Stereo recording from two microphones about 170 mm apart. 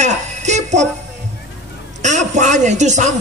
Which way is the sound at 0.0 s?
45° right (ahead or behind).